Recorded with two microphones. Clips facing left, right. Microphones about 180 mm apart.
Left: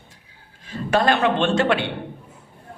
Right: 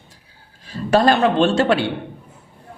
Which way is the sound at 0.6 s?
35° right (ahead or behind).